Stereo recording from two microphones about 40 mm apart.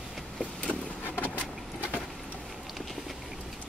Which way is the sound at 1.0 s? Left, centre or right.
Left.